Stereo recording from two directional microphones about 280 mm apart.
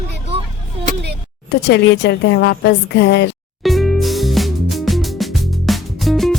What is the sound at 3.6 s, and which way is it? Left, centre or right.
Music, centre.